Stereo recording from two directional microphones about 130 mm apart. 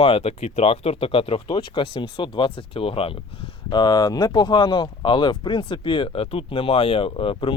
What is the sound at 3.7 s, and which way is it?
Speech, 30° left (ahead or behind).